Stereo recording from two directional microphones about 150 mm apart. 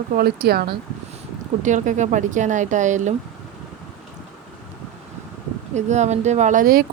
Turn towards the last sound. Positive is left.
turn(degrees=-70)  # may be behind; listen again after turning